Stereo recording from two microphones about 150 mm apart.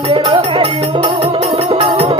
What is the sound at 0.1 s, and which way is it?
Music, 35° right (ahead or behind).